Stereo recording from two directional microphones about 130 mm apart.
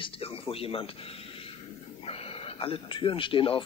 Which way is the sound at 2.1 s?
50° left (ahead or behind).